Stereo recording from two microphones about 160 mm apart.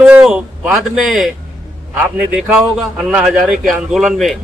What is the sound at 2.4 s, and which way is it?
A man's voice, 5° right (ahead or behind).